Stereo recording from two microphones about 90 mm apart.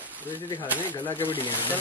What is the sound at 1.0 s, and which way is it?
Speech, 20° left (ahead or behind).